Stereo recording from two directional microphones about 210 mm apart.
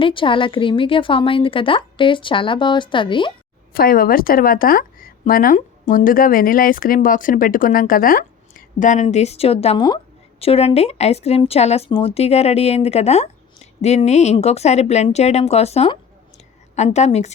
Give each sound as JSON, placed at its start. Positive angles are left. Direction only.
{"t": 0.0, "sound": "speech", "side_deg": 25}
{"t": 3.7, "sound": "a woman's voice", "side_deg": 45}